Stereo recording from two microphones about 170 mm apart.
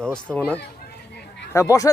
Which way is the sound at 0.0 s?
5° left (ahead or behind).